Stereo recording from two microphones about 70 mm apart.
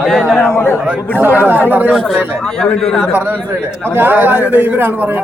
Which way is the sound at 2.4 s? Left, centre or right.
Centre.